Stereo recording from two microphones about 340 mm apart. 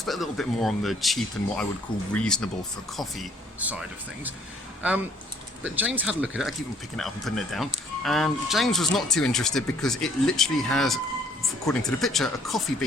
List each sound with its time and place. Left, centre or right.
0.0 s speech: centre
5.6 s speech: centre